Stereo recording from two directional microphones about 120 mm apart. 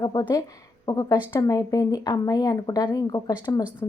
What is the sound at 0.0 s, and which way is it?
A woman's voice, 35° left (ahead or behind).